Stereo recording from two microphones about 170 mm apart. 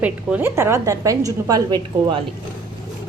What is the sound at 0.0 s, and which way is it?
A woman's voice, 10° right (ahead or behind).